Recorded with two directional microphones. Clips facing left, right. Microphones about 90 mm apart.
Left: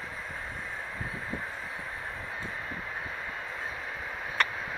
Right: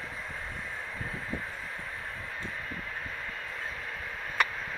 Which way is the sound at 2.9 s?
15° left (ahead or behind).